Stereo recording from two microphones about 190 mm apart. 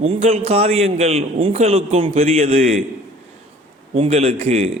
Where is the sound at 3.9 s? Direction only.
30° right (ahead or behind).